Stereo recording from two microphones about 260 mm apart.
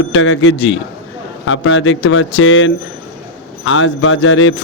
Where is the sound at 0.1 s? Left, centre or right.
Left.